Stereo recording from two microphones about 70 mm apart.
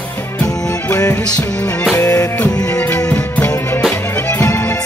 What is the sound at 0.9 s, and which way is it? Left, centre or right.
Music, left.